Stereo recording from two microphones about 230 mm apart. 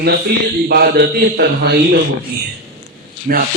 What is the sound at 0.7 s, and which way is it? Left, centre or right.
A man's voice, right.